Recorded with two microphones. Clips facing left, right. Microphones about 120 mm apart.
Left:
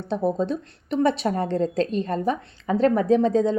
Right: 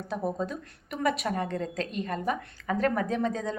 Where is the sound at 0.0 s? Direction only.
30° left (ahead or behind).